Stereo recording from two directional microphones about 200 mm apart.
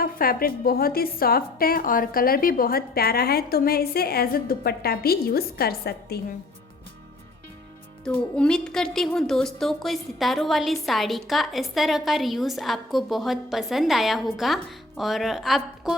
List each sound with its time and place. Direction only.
0.0 s a woman's voice: 50° left (ahead or behind)
8.0 s a woman's voice: 5° left (ahead or behind)